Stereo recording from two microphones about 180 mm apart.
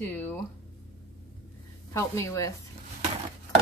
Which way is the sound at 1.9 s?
15° left (ahead or behind).